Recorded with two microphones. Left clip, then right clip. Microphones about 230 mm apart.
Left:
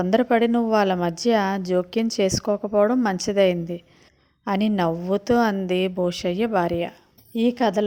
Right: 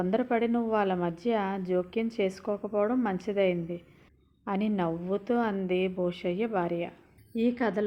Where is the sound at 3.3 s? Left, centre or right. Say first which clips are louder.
Left 8 dB; left.